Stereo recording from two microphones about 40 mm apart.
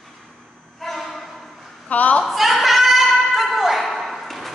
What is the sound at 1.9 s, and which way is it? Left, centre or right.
Speech, left.